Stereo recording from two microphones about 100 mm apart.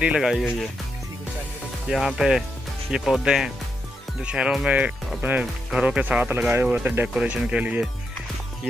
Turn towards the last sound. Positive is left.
turn(degrees=-15)  # may be behind; listen again after turning